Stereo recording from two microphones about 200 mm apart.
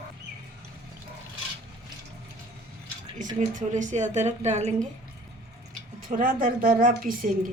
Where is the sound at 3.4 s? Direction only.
40° right (ahead or behind).